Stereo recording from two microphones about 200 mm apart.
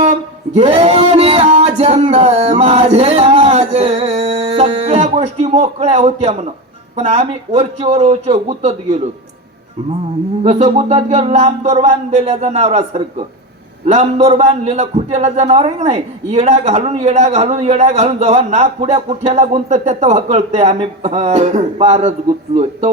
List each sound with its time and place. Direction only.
0.5 s a sound: 30° right (ahead or behind)
6.9 s a man's voice: 30° right (ahead or behind)
10.4 s a man's voice: 30° right (ahead or behind)